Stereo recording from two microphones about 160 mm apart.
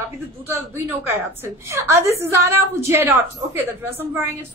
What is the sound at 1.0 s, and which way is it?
A woman's voice, 15° right (ahead or behind).